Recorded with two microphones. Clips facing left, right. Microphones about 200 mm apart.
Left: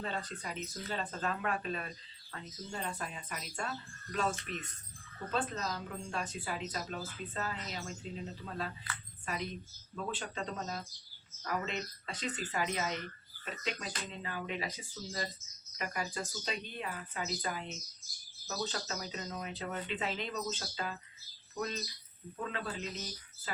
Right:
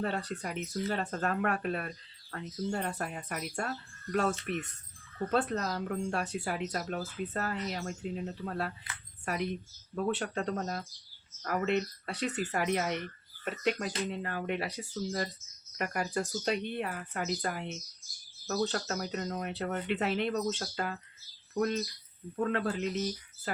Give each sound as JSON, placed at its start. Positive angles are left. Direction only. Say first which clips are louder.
{"t": 0.0, "sound": "speech", "louder": "right 6 dB", "side_deg": -65}